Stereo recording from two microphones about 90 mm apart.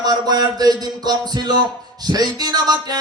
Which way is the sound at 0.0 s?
45° right (ahead or behind).